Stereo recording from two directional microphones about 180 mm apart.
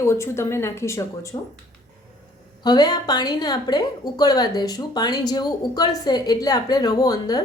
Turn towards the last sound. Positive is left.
turn(degrees=20)  # may be behind; listen again after turning